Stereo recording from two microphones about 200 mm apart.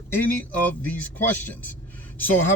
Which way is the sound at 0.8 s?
10° left (ahead or behind).